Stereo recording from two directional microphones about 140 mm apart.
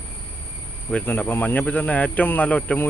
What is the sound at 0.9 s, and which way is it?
Speech, 10° left (ahead or behind).